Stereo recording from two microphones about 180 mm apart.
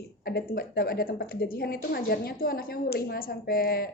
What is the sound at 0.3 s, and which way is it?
A woman's voice, 55° left (ahead or behind).